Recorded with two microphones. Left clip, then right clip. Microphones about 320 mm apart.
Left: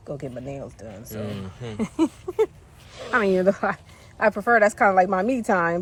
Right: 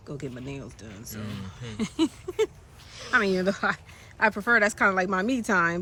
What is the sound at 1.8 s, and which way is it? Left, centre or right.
A woman's voice, centre.